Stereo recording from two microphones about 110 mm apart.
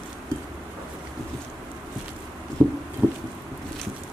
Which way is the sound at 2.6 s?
35° right (ahead or behind).